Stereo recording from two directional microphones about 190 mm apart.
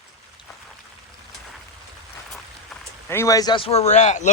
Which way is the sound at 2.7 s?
Centre (ahead or behind).